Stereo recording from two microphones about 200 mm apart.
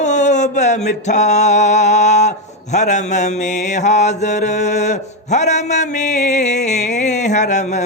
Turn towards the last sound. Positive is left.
turn(degrees=35)  # may be behind; listen again after turning